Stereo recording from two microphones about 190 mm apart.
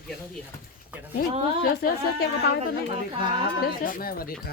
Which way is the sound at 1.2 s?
50° left (ahead or behind).